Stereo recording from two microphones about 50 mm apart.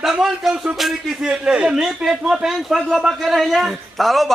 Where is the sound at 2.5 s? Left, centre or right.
Centre.